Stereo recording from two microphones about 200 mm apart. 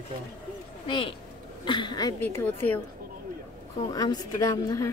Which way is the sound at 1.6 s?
20° left (ahead or behind).